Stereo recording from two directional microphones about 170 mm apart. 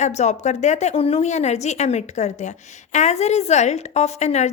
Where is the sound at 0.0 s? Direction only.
40° left (ahead or behind).